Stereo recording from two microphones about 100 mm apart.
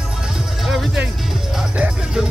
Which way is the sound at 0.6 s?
Centre (ahead or behind).